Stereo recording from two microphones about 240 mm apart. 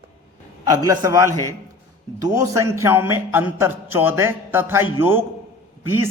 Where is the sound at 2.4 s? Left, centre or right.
Centre.